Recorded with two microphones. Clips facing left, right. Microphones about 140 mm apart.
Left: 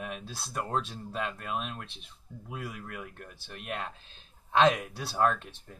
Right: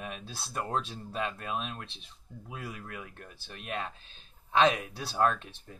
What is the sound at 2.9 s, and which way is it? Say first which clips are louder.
Speech: left 2 dB; centre (ahead or behind).